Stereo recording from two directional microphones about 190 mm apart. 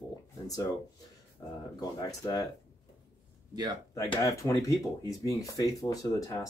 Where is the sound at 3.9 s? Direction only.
15° left (ahead or behind).